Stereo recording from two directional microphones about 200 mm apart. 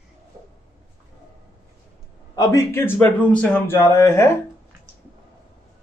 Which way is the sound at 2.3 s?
15° left (ahead or behind).